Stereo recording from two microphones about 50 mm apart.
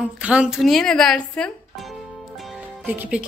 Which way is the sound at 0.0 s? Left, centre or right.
Right.